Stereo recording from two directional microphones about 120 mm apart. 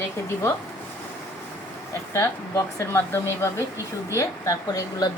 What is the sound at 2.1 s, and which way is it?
A woman's voice, 25° left (ahead or behind).